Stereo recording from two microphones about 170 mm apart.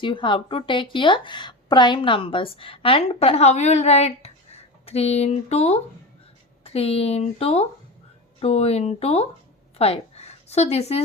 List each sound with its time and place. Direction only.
0.0 s a woman's voice: 30° left (ahead or behind)